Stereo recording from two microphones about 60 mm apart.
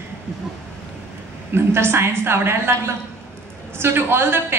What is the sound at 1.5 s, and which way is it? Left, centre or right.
A woman's voice, right.